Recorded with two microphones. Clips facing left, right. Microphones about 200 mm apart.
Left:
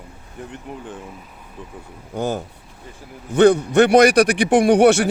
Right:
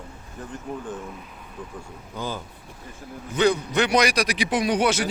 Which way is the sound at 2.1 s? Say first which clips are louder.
Left 8 dB; 45° left (ahead or behind).